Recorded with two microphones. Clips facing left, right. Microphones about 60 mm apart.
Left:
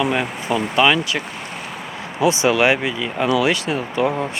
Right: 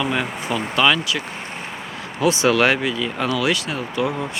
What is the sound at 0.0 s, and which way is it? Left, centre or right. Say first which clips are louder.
Speech: left 3 dB; centre.